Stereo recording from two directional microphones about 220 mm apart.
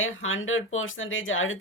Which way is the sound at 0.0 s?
65° left (ahead or behind).